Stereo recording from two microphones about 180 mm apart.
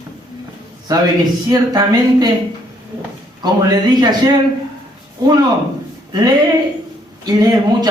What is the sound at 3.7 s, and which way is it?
Speech, 25° right (ahead or behind).